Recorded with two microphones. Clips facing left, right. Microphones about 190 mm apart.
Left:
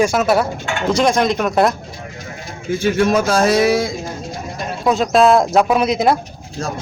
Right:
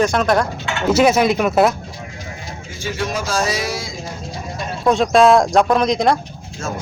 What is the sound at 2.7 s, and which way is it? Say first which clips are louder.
Speech: left 9 dB; 60° left (ahead or behind).